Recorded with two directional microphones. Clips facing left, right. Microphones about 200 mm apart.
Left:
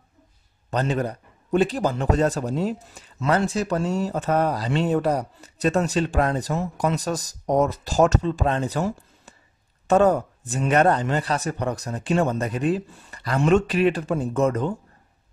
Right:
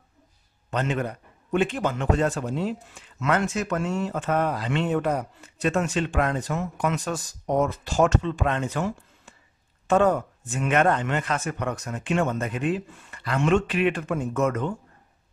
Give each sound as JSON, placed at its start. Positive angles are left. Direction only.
{"t": 0.7, "sound": "a man's voice", "side_deg": 35}